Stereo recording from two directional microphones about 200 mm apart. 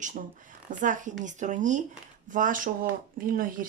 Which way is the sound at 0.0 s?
40° right (ahead or behind).